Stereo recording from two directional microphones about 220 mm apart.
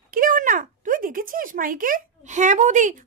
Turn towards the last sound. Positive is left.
turn(degrees=-35)  # may be behind; listen again after turning